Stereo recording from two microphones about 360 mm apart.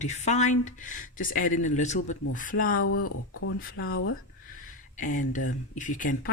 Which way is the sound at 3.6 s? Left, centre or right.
Left.